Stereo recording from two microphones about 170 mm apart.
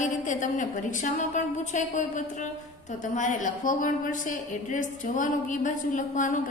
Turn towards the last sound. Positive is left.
turn(degrees=50)  # may be behind; listen again after turning